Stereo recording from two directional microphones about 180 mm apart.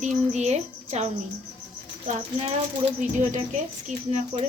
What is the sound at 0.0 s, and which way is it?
A woman's voice, 40° right (ahead or behind).